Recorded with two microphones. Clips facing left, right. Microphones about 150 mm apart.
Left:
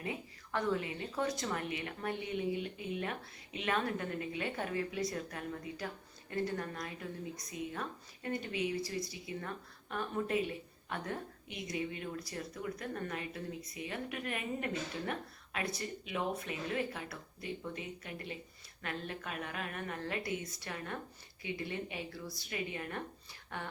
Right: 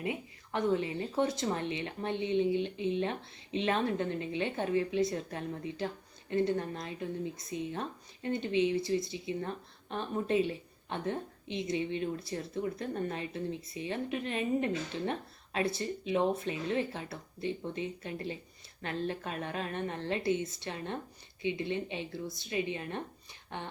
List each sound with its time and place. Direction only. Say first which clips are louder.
0.0 s speech: right 5 dB; 25° right (ahead or behind)